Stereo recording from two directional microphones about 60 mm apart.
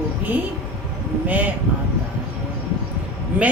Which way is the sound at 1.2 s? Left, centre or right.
Right.